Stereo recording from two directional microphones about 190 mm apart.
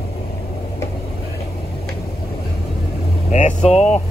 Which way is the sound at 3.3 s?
35° left (ahead or behind).